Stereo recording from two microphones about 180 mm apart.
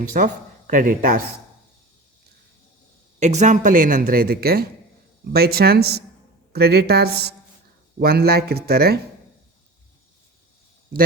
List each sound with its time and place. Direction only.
0.7 s speech: 50° right (ahead or behind)
3.2 s speech: 40° right (ahead or behind); by 9.0 s 60° right (ahead or behind)